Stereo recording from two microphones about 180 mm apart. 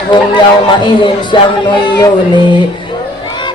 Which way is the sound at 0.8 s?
25° left (ahead or behind).